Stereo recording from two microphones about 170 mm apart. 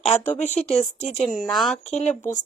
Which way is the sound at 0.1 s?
45° left (ahead or behind).